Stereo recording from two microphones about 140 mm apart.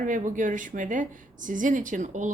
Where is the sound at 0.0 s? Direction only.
65° right (ahead or behind).